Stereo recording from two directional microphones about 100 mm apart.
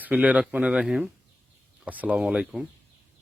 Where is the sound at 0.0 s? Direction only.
15° right (ahead or behind).